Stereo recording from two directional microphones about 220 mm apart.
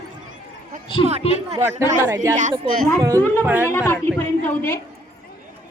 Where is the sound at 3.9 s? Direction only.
10° left (ahead or behind).